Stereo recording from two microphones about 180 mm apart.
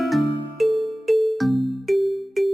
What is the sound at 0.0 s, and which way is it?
Music, centre (ahead or behind).